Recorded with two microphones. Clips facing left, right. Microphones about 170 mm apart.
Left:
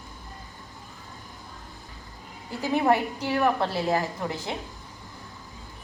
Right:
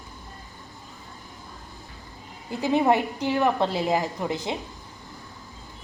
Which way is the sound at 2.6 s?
20° right (ahead or behind).